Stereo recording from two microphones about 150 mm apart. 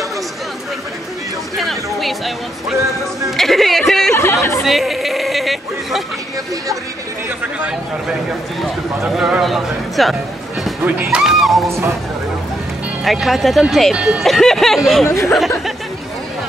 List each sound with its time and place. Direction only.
1.6 s speech: centre (ahead or behind)
4.1 s chatter: 15° left (ahead or behind)
4.6 s a sound: centre (ahead or behind)
7.2 s a man's voice: 10° right (ahead or behind)
13.0 s speech: centre (ahead or behind)
15.0 s speech: 20° left (ahead or behind)